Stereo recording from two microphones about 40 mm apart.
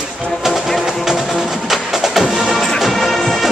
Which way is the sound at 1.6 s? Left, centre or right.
Centre.